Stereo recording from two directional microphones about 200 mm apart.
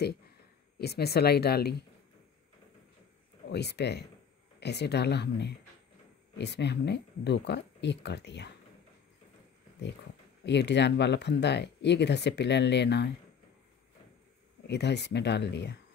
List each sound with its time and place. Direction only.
0.7 s speech: 55° left (ahead or behind)
3.4 s speech: 55° left (ahead or behind)
10.4 s speech: 60° left (ahead or behind)
14.7 s speech: 60° left (ahead or behind)